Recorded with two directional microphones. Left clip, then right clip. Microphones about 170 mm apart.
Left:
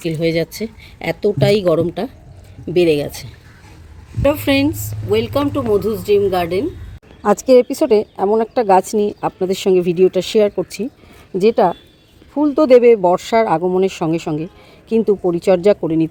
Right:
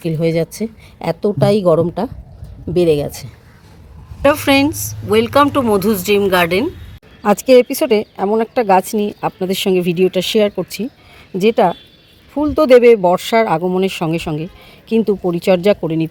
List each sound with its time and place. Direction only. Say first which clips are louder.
0.0 s speech: right 1 dB; 5° right (ahead or behind)
5.5 s speech: right 2 dB; 40° right (ahead or behind)
6.0 s speech: even; 5° right (ahead or behind)
6.2 s speech: right 4 dB; 40° right (ahead or behind)
7.2 s speech: right 1 dB; centre (ahead or behind)